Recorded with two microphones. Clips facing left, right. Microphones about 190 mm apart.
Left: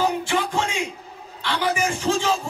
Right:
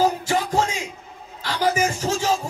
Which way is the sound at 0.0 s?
40° right (ahead or behind).